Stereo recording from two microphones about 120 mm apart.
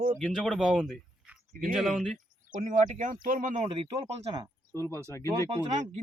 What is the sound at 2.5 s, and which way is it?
Speech, 90° right.